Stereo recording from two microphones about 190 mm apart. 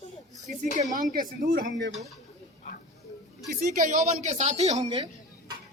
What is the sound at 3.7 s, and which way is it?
A man's voice, 40° right (ahead or behind).